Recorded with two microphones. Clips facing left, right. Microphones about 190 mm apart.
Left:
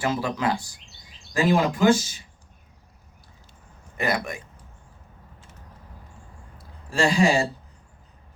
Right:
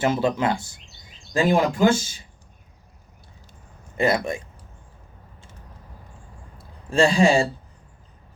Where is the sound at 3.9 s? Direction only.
25° right (ahead or behind).